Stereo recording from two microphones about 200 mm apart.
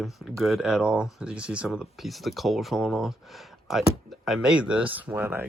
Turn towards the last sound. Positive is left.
turn(degrees=-10)  # may be behind; listen again after turning